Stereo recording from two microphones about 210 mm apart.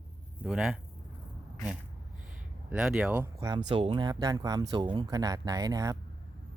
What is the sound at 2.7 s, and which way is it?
Speech, 5° right (ahead or behind).